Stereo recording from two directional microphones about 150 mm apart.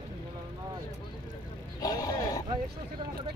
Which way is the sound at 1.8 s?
25° left (ahead or behind).